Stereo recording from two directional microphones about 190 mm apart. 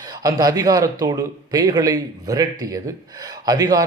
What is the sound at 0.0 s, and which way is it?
A man's voice, 20° right (ahead or behind).